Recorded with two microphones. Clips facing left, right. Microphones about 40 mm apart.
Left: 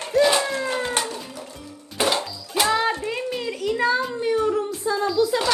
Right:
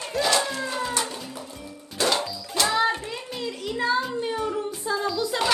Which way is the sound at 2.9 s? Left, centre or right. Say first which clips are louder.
Left 3 dB; left.